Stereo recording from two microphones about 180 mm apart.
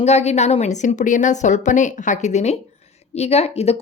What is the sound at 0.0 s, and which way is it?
Speech, 35° left (ahead or behind).